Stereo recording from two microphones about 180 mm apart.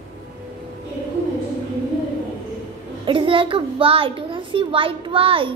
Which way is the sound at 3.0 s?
30° right (ahead or behind).